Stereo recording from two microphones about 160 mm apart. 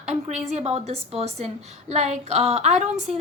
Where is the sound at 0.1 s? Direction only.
45° right (ahead or behind).